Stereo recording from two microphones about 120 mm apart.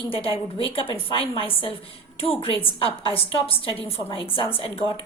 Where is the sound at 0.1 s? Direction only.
50° left (ahead or behind).